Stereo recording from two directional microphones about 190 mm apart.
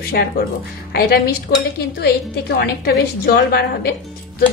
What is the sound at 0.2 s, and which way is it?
Speech, 55° left (ahead or behind).